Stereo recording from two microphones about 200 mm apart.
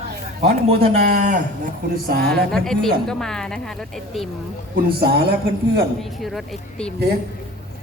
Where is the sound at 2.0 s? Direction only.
50° right (ahead or behind).